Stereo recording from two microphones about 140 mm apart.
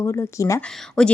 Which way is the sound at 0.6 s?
5° left (ahead or behind).